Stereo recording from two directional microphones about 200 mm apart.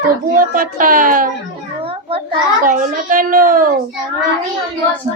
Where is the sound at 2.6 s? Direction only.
40° right (ahead or behind).